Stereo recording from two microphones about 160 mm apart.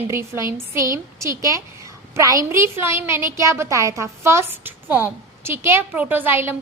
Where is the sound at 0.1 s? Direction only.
15° right (ahead or behind).